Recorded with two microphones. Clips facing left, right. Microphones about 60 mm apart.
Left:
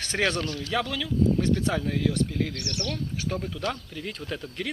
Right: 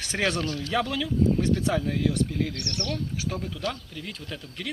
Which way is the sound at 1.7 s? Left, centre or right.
Centre.